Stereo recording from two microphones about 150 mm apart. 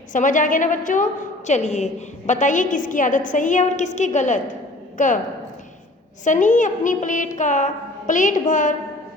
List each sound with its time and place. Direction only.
0.1 s a woman's voice: 60° left (ahead or behind)
6.2 s a woman's voice: 55° left (ahead or behind)